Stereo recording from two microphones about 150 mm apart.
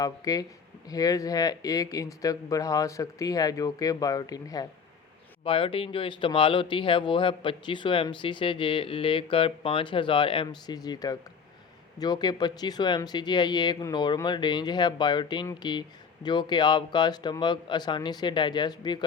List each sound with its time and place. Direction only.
0.0 s speech: 25° left (ahead or behind)
5.4 s speech: 35° left (ahead or behind)